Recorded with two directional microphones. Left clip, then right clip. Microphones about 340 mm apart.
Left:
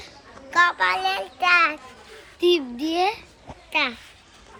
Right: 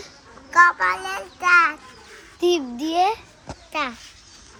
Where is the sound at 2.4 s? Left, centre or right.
Right.